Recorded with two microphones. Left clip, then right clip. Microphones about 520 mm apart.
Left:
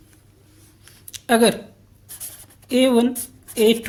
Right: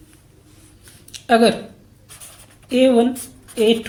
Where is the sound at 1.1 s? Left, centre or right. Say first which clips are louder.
Right 2 dB; left.